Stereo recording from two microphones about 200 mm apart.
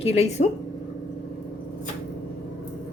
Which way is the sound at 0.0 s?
30° left (ahead or behind).